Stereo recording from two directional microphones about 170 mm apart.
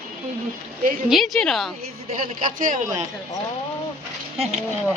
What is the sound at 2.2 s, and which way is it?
Speech, 55° right (ahead or behind).